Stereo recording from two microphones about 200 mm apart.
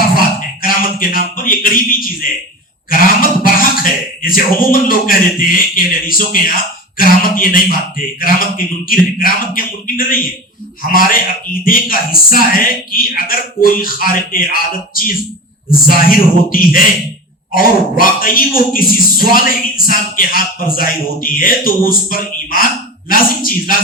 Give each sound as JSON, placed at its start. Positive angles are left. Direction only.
{"t": 0.2, "sound": "a man's voice", "side_deg": 45}
{"t": 11.6, "sound": "a man's voice", "side_deg": 45}
{"t": 15.7, "sound": "a man's voice", "side_deg": 45}